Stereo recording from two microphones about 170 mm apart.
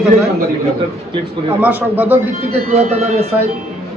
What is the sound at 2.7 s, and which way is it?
Speech, 40° right (ahead or behind).